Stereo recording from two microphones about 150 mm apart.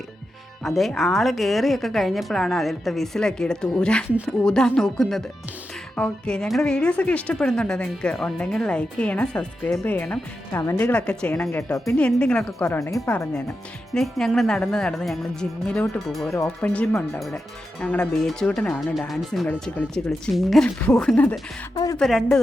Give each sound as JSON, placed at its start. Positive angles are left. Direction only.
{"t": 0.6, "sound": "speech", "side_deg": 0}
{"t": 13.9, "sound": "speech", "side_deg": 0}
{"t": 16.3, "sound": "speech", "side_deg": 20}
{"t": 16.6, "sound": "speech", "side_deg": 10}
{"t": 17.2, "sound": "speech", "side_deg": 0}